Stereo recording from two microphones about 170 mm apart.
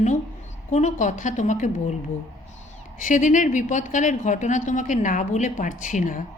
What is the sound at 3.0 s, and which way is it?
Speech, 50° left (ahead or behind).